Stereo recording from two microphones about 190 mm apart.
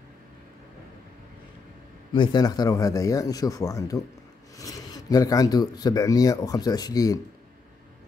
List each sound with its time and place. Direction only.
2.1 s speech: 25° left (ahead or behind)